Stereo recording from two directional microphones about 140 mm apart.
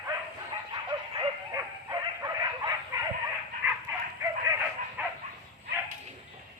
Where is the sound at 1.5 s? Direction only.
25° right (ahead or behind).